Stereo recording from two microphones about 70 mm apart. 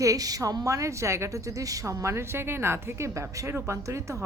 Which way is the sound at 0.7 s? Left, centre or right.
Right.